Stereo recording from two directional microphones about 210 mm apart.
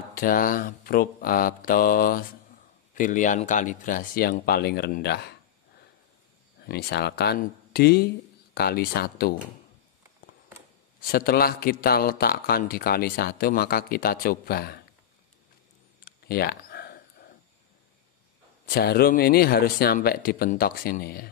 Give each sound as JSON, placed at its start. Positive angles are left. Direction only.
{"t": 0.1, "sound": "a man's voice", "side_deg": 40}
{"t": 6.6, "sound": "a man's voice", "side_deg": 50}
{"t": 11.0, "sound": "a man's voice", "side_deg": 45}
{"t": 16.1, "sound": "a sound", "side_deg": 45}
{"t": 18.7, "sound": "a man's voice", "side_deg": 45}